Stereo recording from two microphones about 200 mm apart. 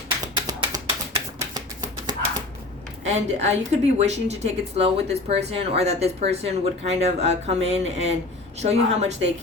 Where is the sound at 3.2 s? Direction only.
35° right (ahead or behind).